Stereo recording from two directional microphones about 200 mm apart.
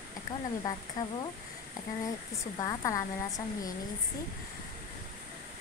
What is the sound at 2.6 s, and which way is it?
A woman's voice, 15° left (ahead or behind).